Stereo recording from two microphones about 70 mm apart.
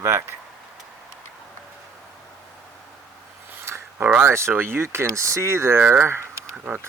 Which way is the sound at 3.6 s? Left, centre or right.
Right.